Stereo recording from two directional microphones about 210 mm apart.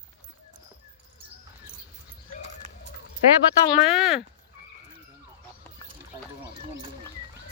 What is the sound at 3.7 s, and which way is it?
Speech, centre (ahead or behind).